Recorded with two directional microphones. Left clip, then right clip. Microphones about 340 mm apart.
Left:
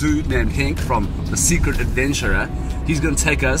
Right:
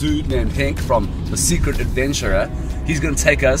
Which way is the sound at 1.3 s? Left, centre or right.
Centre.